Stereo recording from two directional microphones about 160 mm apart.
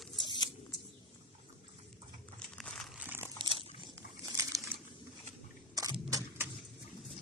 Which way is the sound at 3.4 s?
30° right (ahead or behind).